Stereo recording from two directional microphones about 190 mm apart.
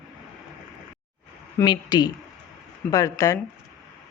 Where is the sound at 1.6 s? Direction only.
20° left (ahead or behind).